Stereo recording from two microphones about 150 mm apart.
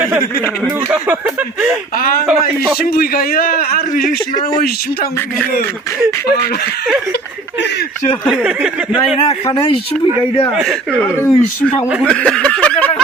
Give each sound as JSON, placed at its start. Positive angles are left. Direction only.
{"t": 0.9, "sound": "speech", "side_deg": -10}
{"t": 2.8, "sound": "a man's voice", "side_deg": 85}
{"t": 8.3, "sound": "speech", "side_deg": -5}
{"t": 10.6, "sound": "speech", "side_deg": 5}
{"t": 12.0, "sound": "a sound", "side_deg": 5}